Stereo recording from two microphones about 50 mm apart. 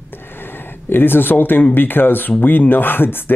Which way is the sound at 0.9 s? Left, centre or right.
Left.